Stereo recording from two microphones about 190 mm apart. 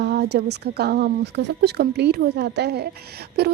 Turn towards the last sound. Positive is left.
turn(degrees=-55)  # may be behind; listen again after turning